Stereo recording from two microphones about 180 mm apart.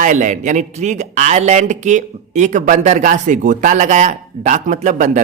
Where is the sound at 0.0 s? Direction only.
45° right (ahead or behind).